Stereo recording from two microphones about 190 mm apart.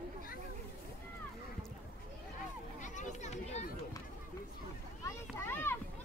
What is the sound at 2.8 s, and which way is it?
Children playing, 40° left (ahead or behind).